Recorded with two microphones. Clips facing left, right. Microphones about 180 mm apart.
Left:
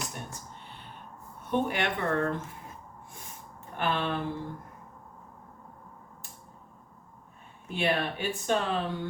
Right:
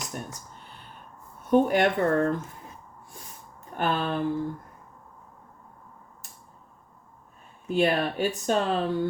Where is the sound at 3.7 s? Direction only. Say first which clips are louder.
Right 3 dB; 40° right (ahead or behind).